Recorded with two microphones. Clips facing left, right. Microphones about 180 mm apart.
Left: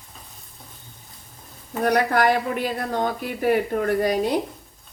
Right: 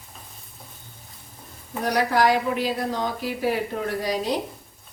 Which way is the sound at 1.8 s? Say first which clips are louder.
Left 2 dB; 55° left (ahead or behind).